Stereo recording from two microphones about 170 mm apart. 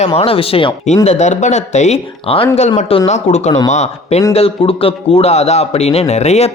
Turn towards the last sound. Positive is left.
turn(degrees=40)  # may be behind; listen again after turning